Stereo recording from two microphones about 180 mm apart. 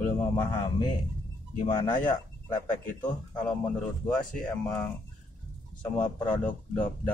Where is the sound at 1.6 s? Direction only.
25° left (ahead or behind).